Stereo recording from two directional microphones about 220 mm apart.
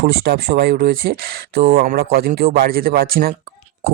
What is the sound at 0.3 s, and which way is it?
Speech, 45° right (ahead or behind).